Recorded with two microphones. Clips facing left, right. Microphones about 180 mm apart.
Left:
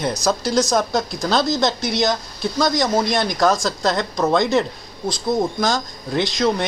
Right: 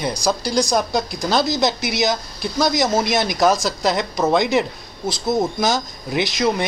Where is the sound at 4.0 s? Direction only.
15° right (ahead or behind).